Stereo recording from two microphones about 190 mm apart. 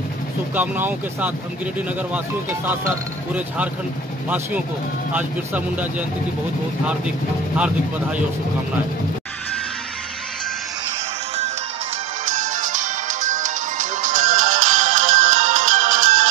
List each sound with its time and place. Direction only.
0.6 s speech: 10° right (ahead or behind)
5.1 s speech: 10° right (ahead or behind)
12.3 s music: 40° right (ahead or behind)